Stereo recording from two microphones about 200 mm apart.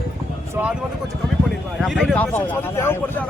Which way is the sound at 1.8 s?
Centre (ahead or behind).